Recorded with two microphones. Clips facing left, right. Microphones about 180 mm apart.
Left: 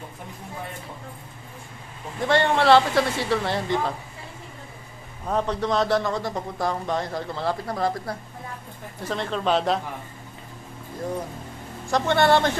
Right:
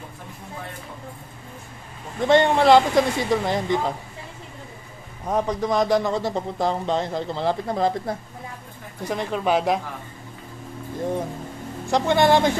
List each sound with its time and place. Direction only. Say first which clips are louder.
2.2 s speech: right 3 dB; 20° right (ahead or behind)
5.2 s a man's voice: right 1 dB; 15° right (ahead or behind)
11.9 s speech: right 2 dB; 15° right (ahead or behind)